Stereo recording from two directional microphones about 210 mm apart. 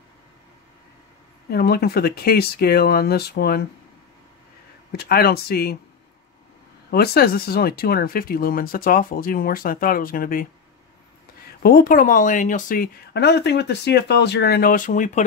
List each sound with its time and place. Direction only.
1.5 s speech: 50° left (ahead or behind)
4.9 s speech: 50° left (ahead or behind)
6.9 s speech: 45° left (ahead or behind)
11.6 s speech: 45° left (ahead or behind)